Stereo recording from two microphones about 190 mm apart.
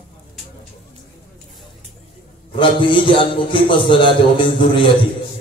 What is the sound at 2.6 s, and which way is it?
A man's voice, 25° left (ahead or behind).